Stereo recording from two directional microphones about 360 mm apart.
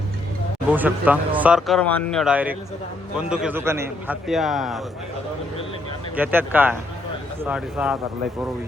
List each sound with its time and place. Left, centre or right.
0.7 s speech: centre
6.1 s speech: centre